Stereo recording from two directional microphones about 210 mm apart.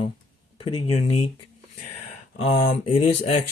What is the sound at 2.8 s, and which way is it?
Speech, 30° left (ahead or behind).